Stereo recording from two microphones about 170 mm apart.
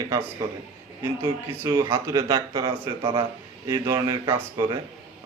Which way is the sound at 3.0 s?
30° right (ahead or behind).